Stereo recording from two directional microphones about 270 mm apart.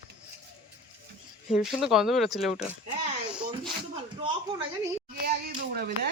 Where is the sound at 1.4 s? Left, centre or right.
Centre.